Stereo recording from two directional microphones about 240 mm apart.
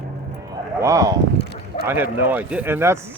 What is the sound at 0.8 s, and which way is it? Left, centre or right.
Speech, centre.